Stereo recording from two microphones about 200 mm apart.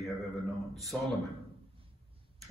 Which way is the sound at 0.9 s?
Centre (ahead or behind).